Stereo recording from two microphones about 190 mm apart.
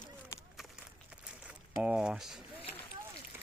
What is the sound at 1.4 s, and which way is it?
Speech, 5° right (ahead or behind).